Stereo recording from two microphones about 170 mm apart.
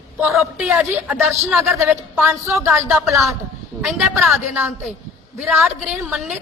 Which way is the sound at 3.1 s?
Centre (ahead or behind).